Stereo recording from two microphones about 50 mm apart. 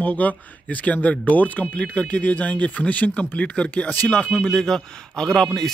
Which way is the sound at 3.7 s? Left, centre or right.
Left.